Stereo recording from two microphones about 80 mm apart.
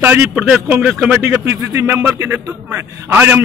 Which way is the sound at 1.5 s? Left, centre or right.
Right.